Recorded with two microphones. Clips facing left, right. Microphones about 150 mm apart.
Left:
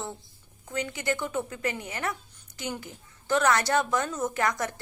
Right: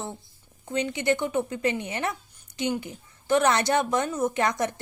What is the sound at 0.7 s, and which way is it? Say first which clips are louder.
Speech: right 5 dB; 20° right (ahead or behind).